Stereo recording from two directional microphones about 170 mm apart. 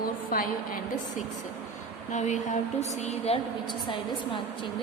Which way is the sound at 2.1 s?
45° left (ahead or behind).